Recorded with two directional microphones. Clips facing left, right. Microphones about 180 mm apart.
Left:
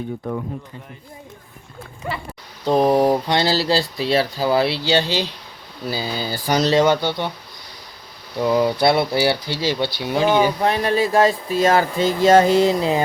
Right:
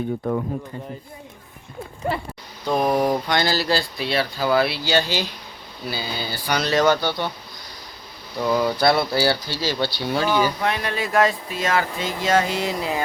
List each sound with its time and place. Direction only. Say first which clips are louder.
2.6 s speech: left 4 dB; 30° left (ahead or behind)
5.9 s speech: left 4 dB; 40° left (ahead or behind)
6.7 s speech: left 1 dB; 25° left (ahead or behind)
8.4 s speech: left 3 dB; 20° left (ahead or behind)
10.6 s speech: left 6 dB; 35° left (ahead or behind)